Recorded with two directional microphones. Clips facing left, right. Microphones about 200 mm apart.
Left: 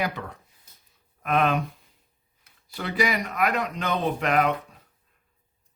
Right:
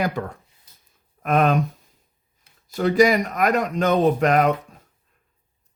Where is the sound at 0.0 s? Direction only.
45° right (ahead or behind).